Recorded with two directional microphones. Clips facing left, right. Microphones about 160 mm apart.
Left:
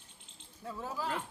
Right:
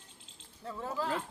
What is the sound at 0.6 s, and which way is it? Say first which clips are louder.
Speech: right 2 dB; 10° left (ahead or behind).